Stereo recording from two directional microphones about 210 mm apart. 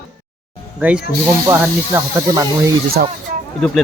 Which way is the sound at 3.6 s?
Centre (ahead or behind).